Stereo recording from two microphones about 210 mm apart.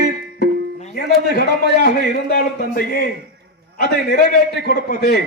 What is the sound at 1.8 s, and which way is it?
A man's voice, 45° left (ahead or behind).